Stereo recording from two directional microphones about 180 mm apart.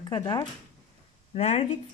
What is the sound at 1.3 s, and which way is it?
Speech, 35° left (ahead or behind).